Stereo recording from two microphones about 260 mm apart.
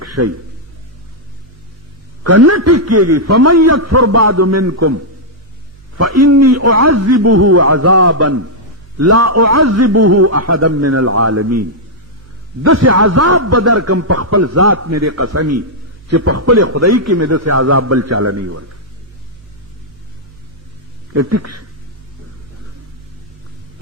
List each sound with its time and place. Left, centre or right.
0.0 s a sound: right
2.2 s a man's voice: right
12.6 s a man's voice: right
21.1 s a man's voice: right